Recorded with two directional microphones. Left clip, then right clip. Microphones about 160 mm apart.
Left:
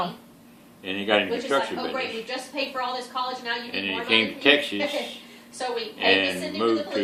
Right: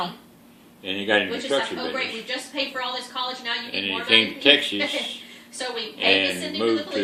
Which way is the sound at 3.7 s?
10° left (ahead or behind).